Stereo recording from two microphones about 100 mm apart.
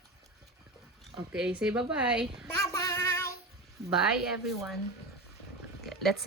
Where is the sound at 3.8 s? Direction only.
90° right.